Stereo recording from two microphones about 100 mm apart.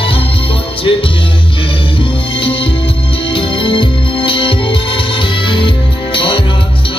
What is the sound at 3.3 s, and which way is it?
Music, 55° left (ahead or behind).